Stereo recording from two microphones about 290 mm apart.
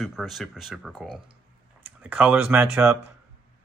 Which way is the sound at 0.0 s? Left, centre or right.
Centre.